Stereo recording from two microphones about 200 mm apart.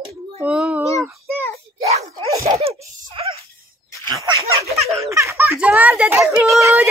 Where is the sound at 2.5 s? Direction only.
30° right (ahead or behind).